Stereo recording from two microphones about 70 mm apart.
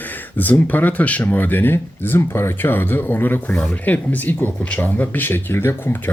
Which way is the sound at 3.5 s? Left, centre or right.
Centre.